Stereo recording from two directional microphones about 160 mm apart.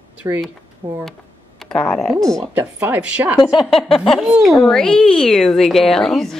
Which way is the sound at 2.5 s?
10° right (ahead or behind).